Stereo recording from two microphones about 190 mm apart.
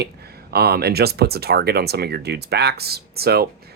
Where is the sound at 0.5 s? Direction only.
55° right (ahead or behind).